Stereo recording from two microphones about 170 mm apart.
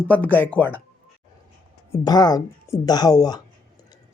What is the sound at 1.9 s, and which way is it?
Speech, 25° left (ahead or behind).